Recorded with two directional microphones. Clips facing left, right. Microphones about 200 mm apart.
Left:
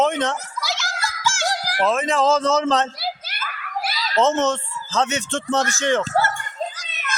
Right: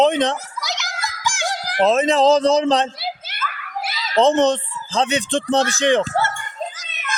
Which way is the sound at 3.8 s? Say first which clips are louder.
Right 3 dB; 20° right (ahead or behind).